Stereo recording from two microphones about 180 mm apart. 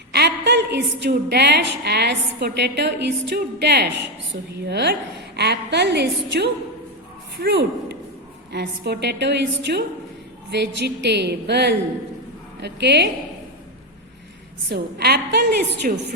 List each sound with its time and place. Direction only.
0.1 s a woman's voice: 70° right (ahead or behind)
14.7 s a woman's voice: 65° right (ahead or behind)